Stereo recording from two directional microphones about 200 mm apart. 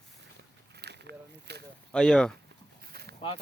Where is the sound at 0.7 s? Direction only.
55° right (ahead or behind).